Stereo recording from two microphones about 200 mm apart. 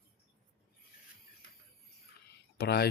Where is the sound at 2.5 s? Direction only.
55° left (ahead or behind).